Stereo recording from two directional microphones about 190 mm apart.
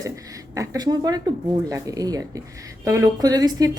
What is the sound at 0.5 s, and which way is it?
A woman's voice, 15° right (ahead or behind).